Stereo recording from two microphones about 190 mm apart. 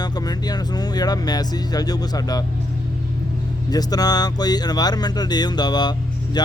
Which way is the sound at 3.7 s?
20° left (ahead or behind).